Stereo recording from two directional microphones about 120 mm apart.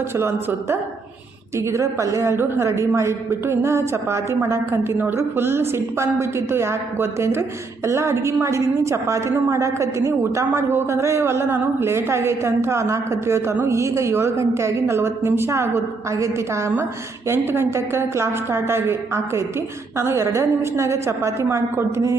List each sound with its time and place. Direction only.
0.1 s a woman's voice: 20° right (ahead or behind)